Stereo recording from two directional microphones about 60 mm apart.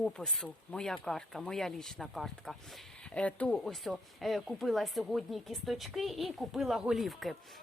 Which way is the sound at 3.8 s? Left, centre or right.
Centre.